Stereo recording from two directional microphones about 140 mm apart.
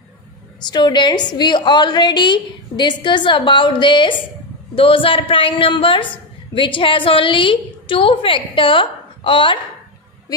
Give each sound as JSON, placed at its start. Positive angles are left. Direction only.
{"t": 0.7, "sound": "a woman's voice", "side_deg": 30}